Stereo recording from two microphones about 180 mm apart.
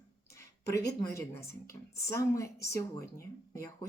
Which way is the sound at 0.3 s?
20° left (ahead or behind).